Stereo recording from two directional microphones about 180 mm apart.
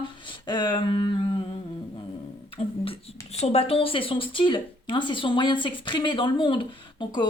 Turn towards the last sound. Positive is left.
turn(degrees=25)  # may be behind; listen again after turning